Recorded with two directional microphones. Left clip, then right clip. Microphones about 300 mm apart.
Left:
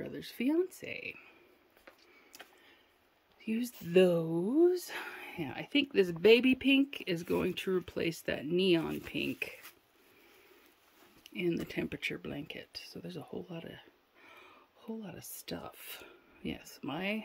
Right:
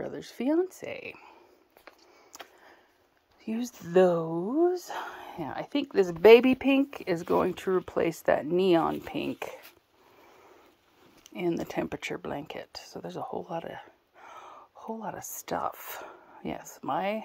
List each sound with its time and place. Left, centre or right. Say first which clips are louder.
0.0 s speech: right 4 dB; centre
3.4 s speech: right 2 dB; centre
11.6 s speech: right 4 dB; centre
15.4 s speech: right 12 dB; centre